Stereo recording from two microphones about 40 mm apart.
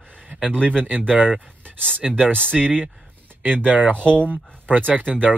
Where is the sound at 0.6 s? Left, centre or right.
Right.